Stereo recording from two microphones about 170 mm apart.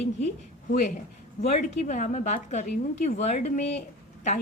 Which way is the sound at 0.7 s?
45° left (ahead or behind).